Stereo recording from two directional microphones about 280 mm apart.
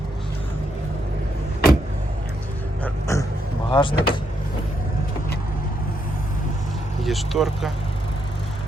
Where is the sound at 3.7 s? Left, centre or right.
Centre.